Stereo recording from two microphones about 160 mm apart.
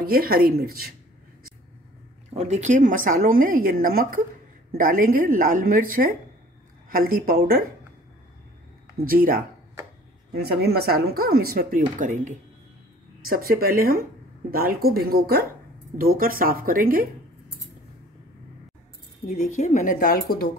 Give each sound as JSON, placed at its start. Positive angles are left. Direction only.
{"t": 0.0, "sound": "speech", "side_deg": -70}
{"t": 2.3, "sound": "a woman's voice", "side_deg": -45}
{"t": 9.0, "sound": "a woman's voice", "side_deg": -65}
{"t": 10.3, "sound": "speech", "side_deg": -80}
{"t": 13.3, "sound": "speech", "side_deg": -65}
{"t": 16.0, "sound": "a woman's voice", "side_deg": -65}
{"t": 19.2, "sound": "speech", "side_deg": 50}